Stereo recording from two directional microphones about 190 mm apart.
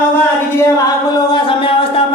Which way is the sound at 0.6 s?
20° left (ahead or behind).